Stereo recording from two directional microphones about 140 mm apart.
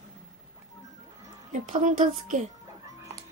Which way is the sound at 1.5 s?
65° right (ahead or behind).